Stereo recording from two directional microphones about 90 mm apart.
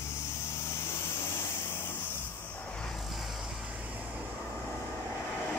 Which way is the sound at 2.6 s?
10° left (ahead or behind).